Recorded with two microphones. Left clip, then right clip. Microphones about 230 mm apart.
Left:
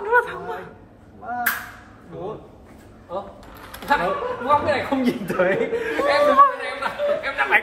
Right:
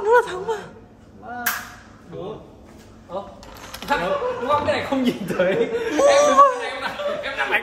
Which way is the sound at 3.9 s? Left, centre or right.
Centre.